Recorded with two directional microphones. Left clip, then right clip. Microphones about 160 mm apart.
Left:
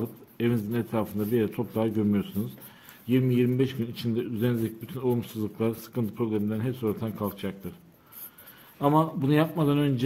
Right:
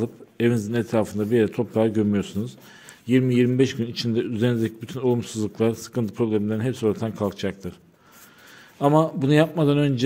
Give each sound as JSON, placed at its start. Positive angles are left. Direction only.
{"t": 0.0, "sound": "a man's voice", "side_deg": -30}
{"t": 3.1, "sound": "a man's voice", "side_deg": -40}
{"t": 8.7, "sound": "a man's voice", "side_deg": -35}